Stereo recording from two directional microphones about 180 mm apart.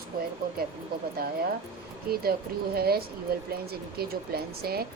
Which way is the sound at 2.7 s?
60° right (ahead or behind).